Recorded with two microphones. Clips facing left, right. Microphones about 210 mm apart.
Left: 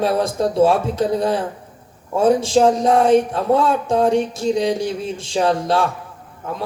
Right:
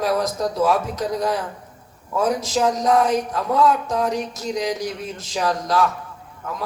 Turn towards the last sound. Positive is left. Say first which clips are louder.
# left 3 dB
turn(degrees=30)  # may be behind; listen again after turning